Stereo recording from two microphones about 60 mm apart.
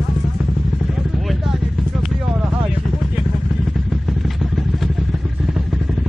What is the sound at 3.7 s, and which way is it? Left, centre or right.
Vehicle, centre.